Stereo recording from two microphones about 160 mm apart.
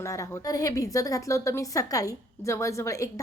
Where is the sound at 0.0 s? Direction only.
20° left (ahead or behind).